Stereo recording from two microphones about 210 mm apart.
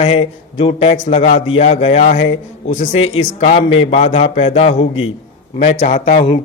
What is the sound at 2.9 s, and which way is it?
Speech, 70° left (ahead or behind).